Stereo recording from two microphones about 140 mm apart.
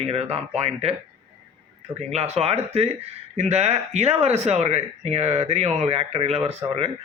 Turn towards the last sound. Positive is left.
turn(degrees=-45)  # may be behind; listen again after turning